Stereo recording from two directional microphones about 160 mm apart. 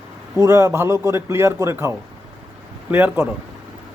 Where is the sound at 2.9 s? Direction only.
15° right (ahead or behind).